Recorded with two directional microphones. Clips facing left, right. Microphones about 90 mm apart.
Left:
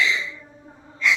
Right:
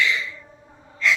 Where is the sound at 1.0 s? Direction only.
15° left (ahead or behind).